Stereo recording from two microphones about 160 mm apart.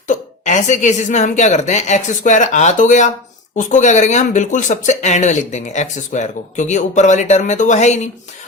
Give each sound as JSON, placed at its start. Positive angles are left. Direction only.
{"t": 0.1, "sound": "speech", "side_deg": 50}